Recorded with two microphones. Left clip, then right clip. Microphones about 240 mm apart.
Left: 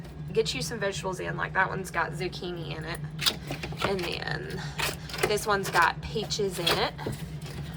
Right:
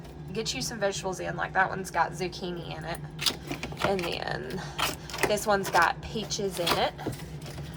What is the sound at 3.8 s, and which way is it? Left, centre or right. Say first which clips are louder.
Speech: right 1 dB; centre.